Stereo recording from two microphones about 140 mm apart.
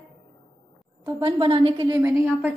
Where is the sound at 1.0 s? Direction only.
35° right (ahead or behind).